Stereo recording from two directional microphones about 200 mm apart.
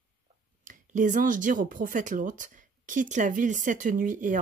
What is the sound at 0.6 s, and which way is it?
Speech, 40° right (ahead or behind).